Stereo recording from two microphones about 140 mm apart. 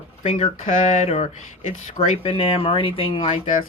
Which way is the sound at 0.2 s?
50° left (ahead or behind).